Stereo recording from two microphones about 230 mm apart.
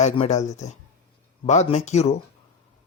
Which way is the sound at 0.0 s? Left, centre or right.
Left.